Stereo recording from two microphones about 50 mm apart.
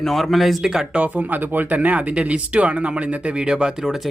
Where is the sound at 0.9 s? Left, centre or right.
Right; by 4.1 s centre.